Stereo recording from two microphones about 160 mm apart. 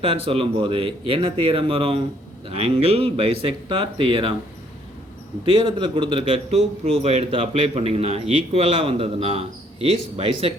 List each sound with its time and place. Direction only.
0.3 s a man's voice: 35° right (ahead or behind)
5.5 s a man's voice: 30° right (ahead or behind)